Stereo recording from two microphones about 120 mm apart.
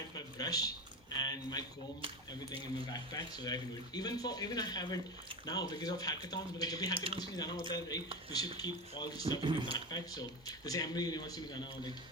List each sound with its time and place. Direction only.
0.3 s speech: 30° left (ahead or behind)
1.1 s a sound: 35° left (ahead or behind)
2.9 s speech: 35° left (ahead or behind)
9.4 s speech: 40° right (ahead or behind)
9.9 s speech: 35° left (ahead or behind)